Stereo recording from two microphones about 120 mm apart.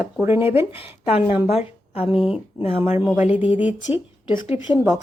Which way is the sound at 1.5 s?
55° left (ahead or behind).